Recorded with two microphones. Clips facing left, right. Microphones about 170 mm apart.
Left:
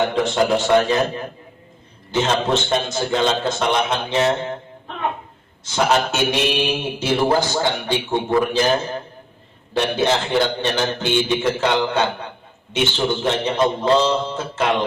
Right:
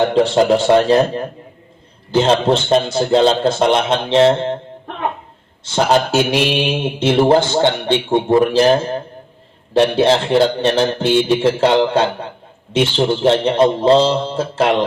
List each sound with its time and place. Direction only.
0.0 s a man's voice: 30° right (ahead or behind)
5.6 s a man's voice: 30° right (ahead or behind)